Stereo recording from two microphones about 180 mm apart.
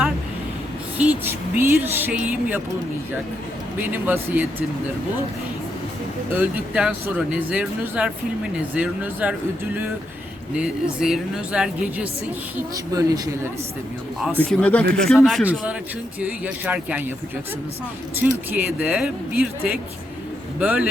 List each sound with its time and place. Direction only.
0.9 s speech: 10° right (ahead or behind)
3.9 s speech: 10° right (ahead or behind)
6.3 s speech: 10° right (ahead or behind)
11.0 s a woman's voice: 5° right (ahead or behind)
12.7 s speech: 20° right (ahead or behind)
14.3 s a woman's voice: 5° left (ahead or behind)
18.2 s speech: 10° right (ahead or behind)